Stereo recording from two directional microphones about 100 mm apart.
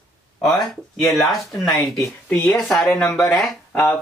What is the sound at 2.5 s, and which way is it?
Speech, 5° left (ahead or behind).